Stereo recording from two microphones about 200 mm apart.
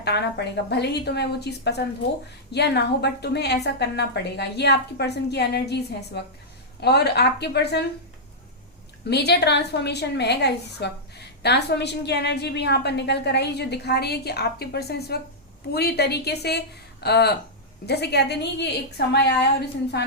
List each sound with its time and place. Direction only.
0.0 s a woman's voice: 55° left (ahead or behind)
9.0 s a woman's voice: 55° left (ahead or behind)